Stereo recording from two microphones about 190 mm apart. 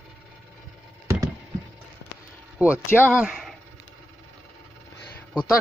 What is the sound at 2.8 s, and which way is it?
Speech, 10° left (ahead or behind).